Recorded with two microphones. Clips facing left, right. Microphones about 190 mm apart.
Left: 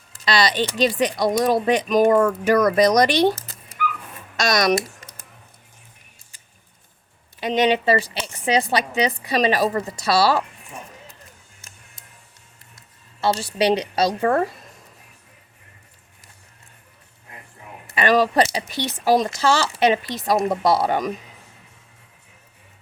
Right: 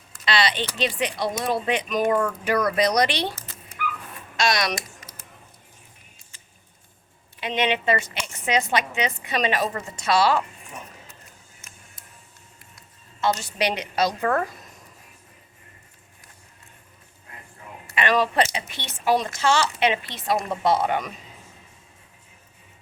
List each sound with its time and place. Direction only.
0.3 s speech: 40° left (ahead or behind)
7.3 s speech: 40° left (ahead or behind)
13.2 s speech: 30° left (ahead or behind)
17.9 s speech: 40° left (ahead or behind)